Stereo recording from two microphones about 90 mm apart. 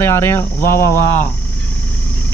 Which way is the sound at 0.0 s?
30° left (ahead or behind).